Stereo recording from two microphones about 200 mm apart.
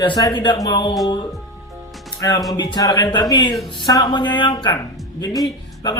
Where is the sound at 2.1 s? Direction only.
20° left (ahead or behind).